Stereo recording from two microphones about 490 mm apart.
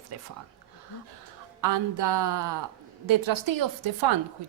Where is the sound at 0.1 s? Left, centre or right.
Right.